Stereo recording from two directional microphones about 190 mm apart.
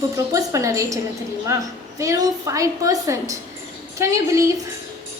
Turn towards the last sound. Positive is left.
turn(degrees=-15)  # may be behind; listen again after turning